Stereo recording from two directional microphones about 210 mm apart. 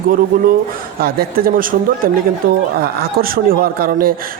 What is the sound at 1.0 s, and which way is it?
Speech, 45° right (ahead or behind).